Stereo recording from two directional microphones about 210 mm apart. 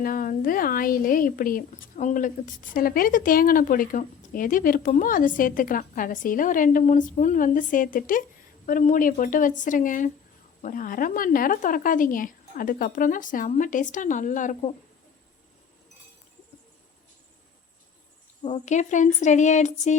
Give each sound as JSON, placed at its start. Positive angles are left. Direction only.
{"t": 0.0, "sound": "speech", "side_deg": 40}
{"t": 18.4, "sound": "speech", "side_deg": 35}